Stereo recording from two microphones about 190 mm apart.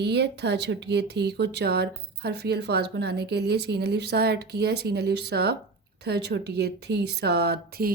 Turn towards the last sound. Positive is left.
turn(degrees=-55)  # may be behind; listen again after turning